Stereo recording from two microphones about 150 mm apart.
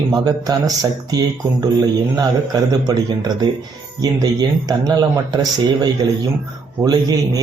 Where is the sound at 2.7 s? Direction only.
25° right (ahead or behind).